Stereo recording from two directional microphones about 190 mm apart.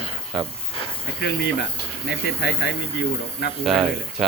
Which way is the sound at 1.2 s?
65° left (ahead or behind).